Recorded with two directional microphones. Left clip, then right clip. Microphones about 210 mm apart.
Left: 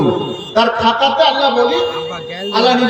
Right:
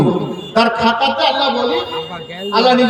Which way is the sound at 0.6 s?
50° right (ahead or behind).